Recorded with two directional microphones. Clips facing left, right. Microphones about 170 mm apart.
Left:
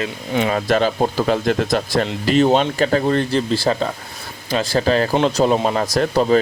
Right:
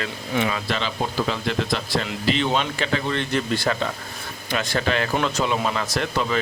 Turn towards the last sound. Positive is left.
turn(degrees=40)  # may be behind; listen again after turning